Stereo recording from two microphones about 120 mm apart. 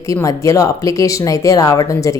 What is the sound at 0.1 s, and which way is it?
A woman's voice, 25° left (ahead or behind).